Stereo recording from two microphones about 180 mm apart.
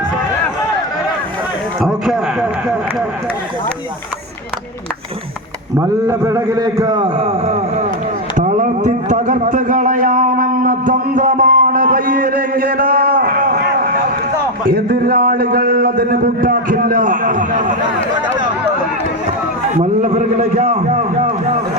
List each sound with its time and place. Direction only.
6.1 s a man's voice: 15° right (ahead or behind)
8.4 s a sound: 45° right (ahead or behind)
14.7 s a man's voice: 55° right (ahead or behind)
19.8 s a man's voice: 40° right (ahead or behind)